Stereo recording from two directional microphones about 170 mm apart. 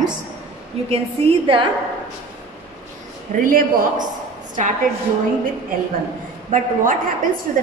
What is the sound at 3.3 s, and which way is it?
Speech, 50° right (ahead or behind).